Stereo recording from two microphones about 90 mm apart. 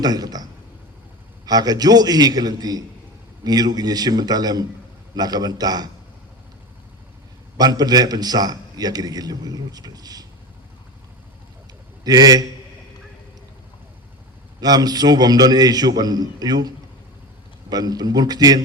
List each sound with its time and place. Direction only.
0.0 s a man's voice: 45° right (ahead or behind)
1.5 s a man's voice: 45° right (ahead or behind)
7.5 s a man's voice: 45° right (ahead or behind)
12.0 s a man's voice: 50° right (ahead or behind)
14.6 s a man's voice: 45° right (ahead or behind)